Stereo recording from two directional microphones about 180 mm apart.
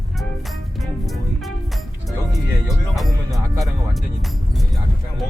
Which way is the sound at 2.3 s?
Centre (ahead or behind).